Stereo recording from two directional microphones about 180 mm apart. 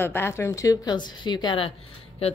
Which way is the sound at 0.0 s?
15° left (ahead or behind).